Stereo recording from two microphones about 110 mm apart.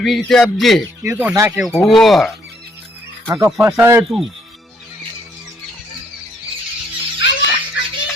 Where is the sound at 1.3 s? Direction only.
20° right (ahead or behind).